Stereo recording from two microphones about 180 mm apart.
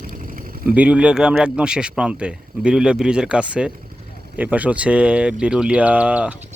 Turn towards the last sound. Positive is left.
turn(degrees=-5)  # may be behind; listen again after turning